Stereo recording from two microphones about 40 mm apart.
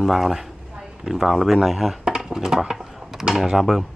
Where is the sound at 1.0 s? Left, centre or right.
Centre.